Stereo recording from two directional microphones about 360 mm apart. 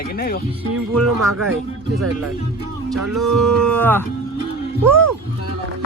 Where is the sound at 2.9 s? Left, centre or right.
Centre.